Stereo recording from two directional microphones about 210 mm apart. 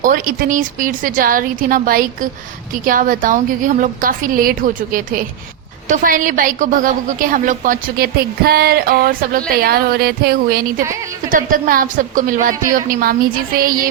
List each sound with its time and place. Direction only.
0.0 s a woman's voice: 40° right (ahead or behind)